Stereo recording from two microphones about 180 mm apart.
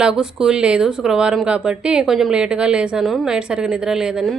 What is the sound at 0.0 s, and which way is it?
Speech, 5° right (ahead or behind).